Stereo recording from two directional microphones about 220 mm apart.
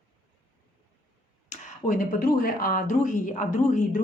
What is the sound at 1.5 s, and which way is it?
Speech, 40° left (ahead or behind).